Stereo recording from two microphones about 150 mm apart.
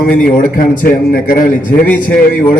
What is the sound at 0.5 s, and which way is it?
Speech, 65° left (ahead or behind).